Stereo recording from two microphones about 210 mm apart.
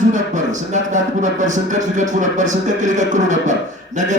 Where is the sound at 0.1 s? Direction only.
35° right (ahead or behind).